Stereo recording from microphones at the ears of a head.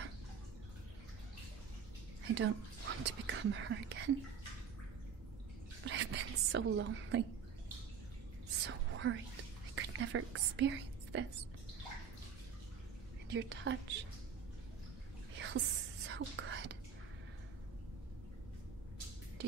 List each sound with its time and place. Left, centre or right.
2.2 s speech: right
5.9 s whispering: right
8.5 s whispering: right
13.3 s speech: right
15.3 s whispering: right